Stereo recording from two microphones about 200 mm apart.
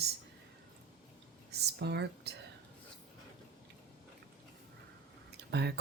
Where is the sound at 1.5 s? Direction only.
55° right (ahead or behind).